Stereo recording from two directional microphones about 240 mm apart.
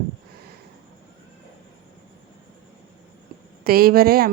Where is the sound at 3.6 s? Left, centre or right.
Right.